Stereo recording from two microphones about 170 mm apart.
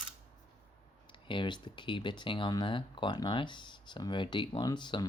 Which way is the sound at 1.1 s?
30° left (ahead or behind).